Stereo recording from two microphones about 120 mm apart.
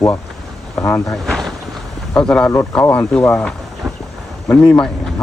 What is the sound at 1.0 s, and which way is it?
Boat, centre (ahead or behind).